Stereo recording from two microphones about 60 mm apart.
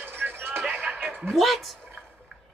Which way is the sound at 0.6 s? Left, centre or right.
Centre.